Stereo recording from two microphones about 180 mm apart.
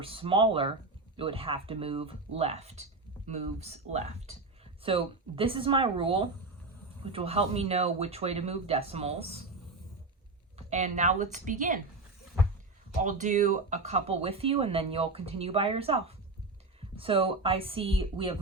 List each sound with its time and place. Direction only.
0.0 s speech: 30° right (ahead or behind)
10.7 s a woman's voice: 40° right (ahead or behind)
13.0 s speech: 45° right (ahead or behind)